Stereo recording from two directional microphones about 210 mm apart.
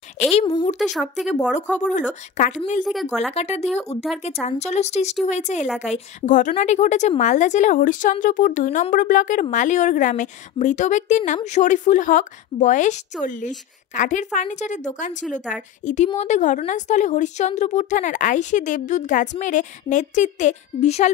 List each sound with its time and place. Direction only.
0.2 s a woman's voice: 30° left (ahead or behind)
0.7 s speech: centre (ahead or behind)
2.3 s a woman's voice: 35° left (ahead or behind)
2.8 s speech: centre (ahead or behind)
3.3 s a woman's voice: 30° left (ahead or behind)